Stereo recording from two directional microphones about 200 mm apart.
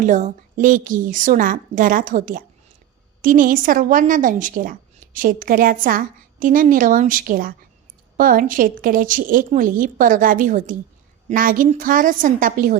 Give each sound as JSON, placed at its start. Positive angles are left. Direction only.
{"t": 0.0, "sound": "a woman's voice", "side_deg": -40}